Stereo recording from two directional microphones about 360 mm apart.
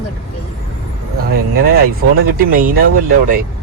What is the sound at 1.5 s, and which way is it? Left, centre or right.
Speech, right.